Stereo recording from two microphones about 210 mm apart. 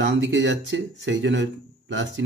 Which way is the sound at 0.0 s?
60° right (ahead or behind).